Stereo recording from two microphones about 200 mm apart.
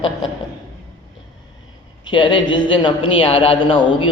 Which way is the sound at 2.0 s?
25° left (ahead or behind).